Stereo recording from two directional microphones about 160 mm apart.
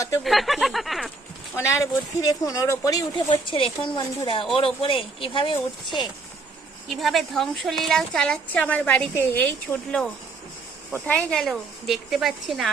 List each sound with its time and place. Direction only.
0.2 s a woman's voice: centre (ahead or behind)
1.5 s speech: 15° left (ahead or behind)
6.8 s a woman's voice: centre (ahead or behind)